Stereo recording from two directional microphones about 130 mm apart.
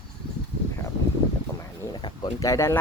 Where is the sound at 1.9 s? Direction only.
35° left (ahead or behind).